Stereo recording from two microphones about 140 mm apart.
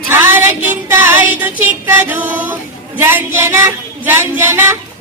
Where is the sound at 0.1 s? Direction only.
15° right (ahead or behind).